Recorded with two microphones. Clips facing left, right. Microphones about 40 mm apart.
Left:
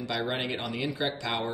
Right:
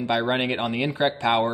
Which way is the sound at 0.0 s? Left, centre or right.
Right.